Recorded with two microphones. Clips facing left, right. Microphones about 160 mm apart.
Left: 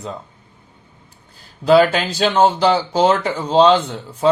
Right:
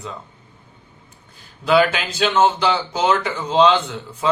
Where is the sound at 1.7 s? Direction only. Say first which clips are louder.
Left 4 dB; 35° left (ahead or behind).